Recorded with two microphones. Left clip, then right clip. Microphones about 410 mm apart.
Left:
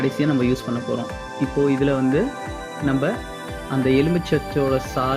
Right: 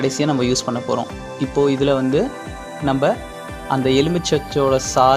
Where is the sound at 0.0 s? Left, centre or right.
Centre.